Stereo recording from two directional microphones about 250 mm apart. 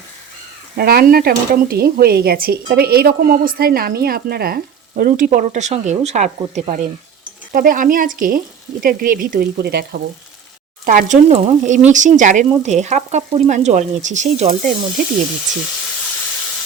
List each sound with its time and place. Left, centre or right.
0.8 s speech: right
10.8 s speech: right